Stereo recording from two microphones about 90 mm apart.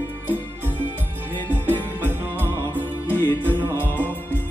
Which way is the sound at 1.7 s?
20° left (ahead or behind).